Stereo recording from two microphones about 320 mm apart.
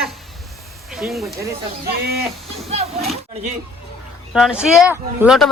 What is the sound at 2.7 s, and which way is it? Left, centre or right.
Speech, centre.